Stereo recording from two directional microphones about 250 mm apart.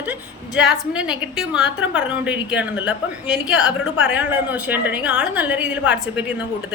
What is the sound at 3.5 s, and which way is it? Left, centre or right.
Speech, left.